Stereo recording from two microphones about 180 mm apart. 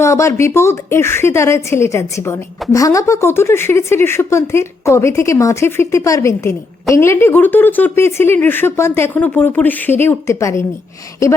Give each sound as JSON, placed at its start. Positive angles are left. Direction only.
{"t": 0.0, "sound": "speech", "side_deg": 15}